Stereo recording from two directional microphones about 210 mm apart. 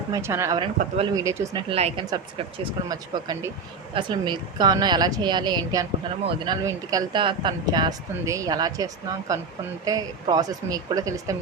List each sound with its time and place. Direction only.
0.1 s speech: 10° right (ahead or behind)
1.7 s speech: 30° right (ahead or behind)
2.6 s speech: 20° right (ahead or behind)